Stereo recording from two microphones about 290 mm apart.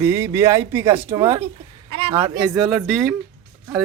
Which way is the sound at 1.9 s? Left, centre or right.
Centre.